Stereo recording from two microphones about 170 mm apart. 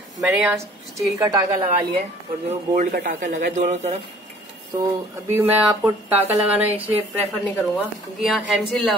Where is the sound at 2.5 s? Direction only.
60° right (ahead or behind); by 4.0 s 40° right (ahead or behind).